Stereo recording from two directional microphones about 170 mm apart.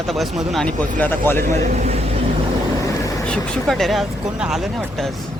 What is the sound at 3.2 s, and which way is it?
Speech, 5° left (ahead or behind).